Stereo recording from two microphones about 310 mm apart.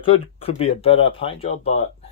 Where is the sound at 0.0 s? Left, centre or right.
Centre.